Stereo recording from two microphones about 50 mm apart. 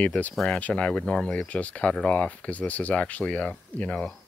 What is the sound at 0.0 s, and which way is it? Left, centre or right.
Speech, left.